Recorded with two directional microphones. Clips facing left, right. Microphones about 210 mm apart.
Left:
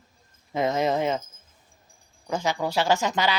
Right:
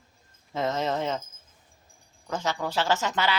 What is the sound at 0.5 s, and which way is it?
Speech, 15° left (ahead or behind).